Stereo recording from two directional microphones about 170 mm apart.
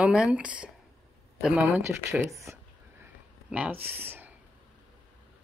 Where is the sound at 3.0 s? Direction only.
10° right (ahead or behind).